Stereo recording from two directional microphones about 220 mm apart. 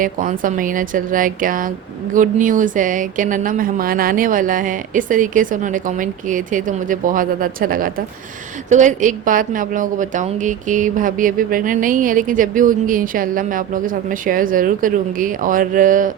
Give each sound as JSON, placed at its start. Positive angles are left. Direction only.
{"t": 0.0, "sound": "a woman's voice", "side_deg": -35}